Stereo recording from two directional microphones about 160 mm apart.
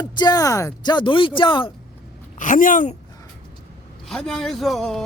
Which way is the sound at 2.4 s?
55° left (ahead or behind).